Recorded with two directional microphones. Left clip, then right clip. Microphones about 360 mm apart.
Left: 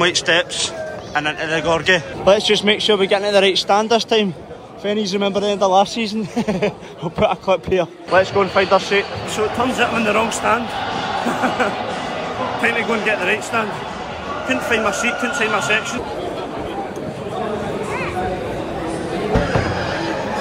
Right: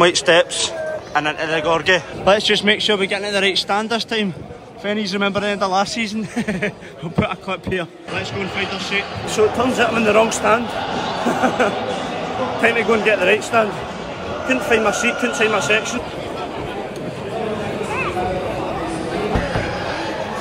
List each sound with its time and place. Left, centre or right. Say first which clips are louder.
0.0 s a man's voice: right 3 dB; centre
5.2 s a man's voice: left 2 dB; centre
5.9 s a man's voice: left 1 dB; centre
9.4 s a man's voice: right 2 dB; centre